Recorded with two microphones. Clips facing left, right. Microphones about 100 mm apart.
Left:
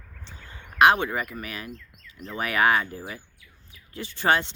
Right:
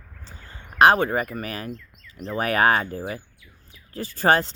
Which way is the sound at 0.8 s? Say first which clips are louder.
Right 3 dB; 40° right (ahead or behind).